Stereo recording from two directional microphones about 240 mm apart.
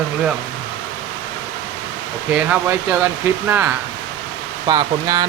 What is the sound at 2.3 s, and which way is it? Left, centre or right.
Speech, centre.